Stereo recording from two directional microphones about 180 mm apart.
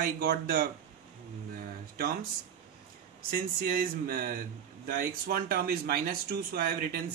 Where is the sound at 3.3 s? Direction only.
55° right (ahead or behind).